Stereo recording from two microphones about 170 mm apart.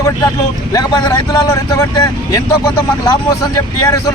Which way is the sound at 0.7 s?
20° left (ahead or behind).